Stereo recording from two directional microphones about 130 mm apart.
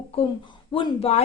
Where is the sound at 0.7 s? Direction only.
45° left (ahead or behind).